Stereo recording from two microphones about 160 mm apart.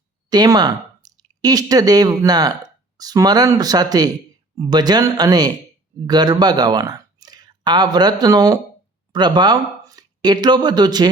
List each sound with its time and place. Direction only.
0.3 s speech: 25° right (ahead or behind)